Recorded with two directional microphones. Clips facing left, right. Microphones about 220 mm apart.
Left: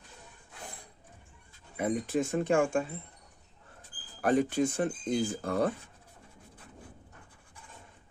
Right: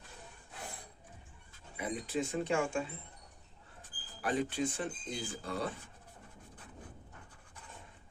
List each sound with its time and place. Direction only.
1.7 s speech: 50° left (ahead or behind)
4.2 s speech: 45° left (ahead or behind)